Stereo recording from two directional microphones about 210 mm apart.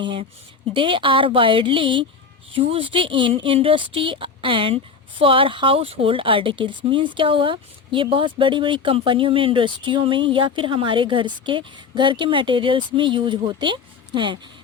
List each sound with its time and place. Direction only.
0.0 s speech: 25° right (ahead or behind)